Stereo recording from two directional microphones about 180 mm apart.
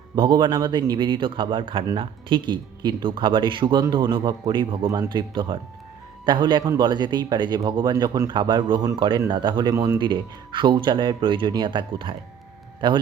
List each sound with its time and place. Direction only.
0.2 s speech: 25° right (ahead or behind)